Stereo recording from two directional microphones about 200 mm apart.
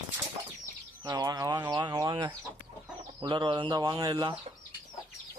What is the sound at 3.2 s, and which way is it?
Speech, 25° right (ahead or behind).